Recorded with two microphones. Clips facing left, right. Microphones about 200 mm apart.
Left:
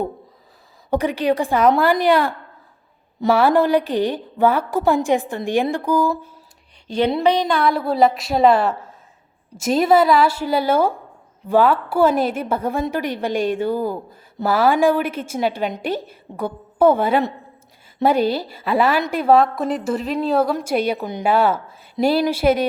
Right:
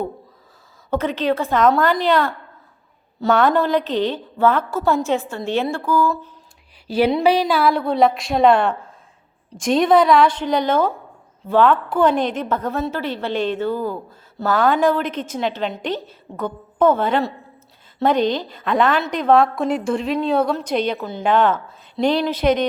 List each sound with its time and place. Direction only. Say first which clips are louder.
0.9 s a woman's voice: left 1 dB; 15° left (ahead or behind)
6.8 s a woman's voice: right 1 dB; 5° right (ahead or behind)